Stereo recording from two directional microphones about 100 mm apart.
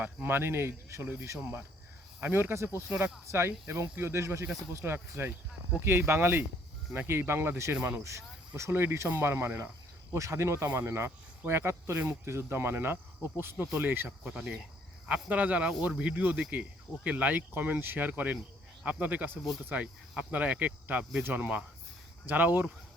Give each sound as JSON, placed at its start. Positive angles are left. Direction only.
{"t": 0.0, "sound": "speech", "side_deg": -20}
{"t": 8.0, "sound": "speech", "side_deg": -30}
{"t": 14.3, "sound": "speech", "side_deg": -5}